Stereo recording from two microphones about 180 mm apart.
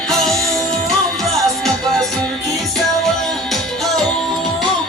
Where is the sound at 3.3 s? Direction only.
Centre (ahead or behind).